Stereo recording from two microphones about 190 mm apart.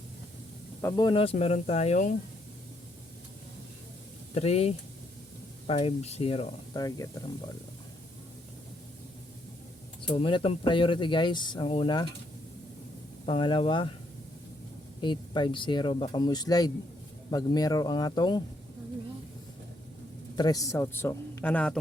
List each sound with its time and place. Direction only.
0.8 s speech: 10° left (ahead or behind)
1.0 s speech: 30° left (ahead or behind)
4.4 s speech: 35° left (ahead or behind)
6.8 s speech: 15° left (ahead or behind)
10.1 s speech: 30° left (ahead or behind)
13.2 s speech: 25° left (ahead or behind)
15.0 s speech: 25° left (ahead or behind)
20.3 s speech: 20° left (ahead or behind)